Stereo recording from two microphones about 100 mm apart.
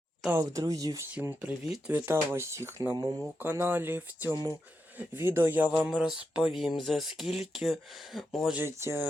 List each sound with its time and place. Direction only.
0.3 s speech: 30° right (ahead or behind)
1.4 s speech: 10° right (ahead or behind)
1.9 s speech: 25° right (ahead or behind)
2.9 s speech: 40° right (ahead or behind)
3.2 s speech: 20° right (ahead or behind); by 8.5 s centre (ahead or behind)
8.5 s speech: 25° right (ahead or behind)